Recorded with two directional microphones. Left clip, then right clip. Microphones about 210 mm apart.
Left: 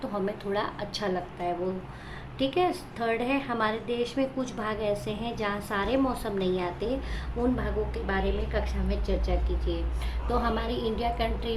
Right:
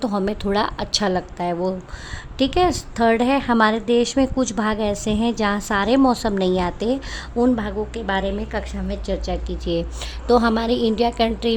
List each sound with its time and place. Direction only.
0.0 s a woman's voice: 50° right (ahead or behind)